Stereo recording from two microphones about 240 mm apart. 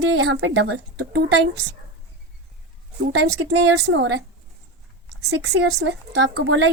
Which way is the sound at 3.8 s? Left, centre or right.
Right.